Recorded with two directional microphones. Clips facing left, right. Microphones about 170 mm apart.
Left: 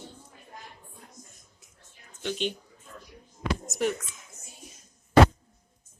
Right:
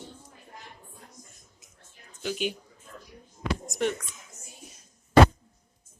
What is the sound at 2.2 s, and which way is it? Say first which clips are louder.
Speech: even; 10° right (ahead or behind).